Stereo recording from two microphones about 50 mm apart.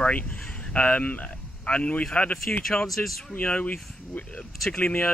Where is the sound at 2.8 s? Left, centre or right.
Centre.